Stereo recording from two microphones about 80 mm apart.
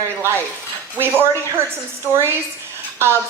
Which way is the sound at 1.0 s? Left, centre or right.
Right.